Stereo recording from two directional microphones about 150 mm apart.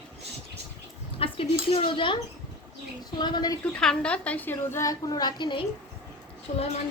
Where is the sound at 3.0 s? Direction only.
30° left (ahead or behind).